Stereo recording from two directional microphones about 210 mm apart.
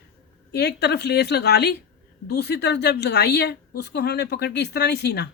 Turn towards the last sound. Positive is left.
turn(degrees=50)  # may be behind; listen again after turning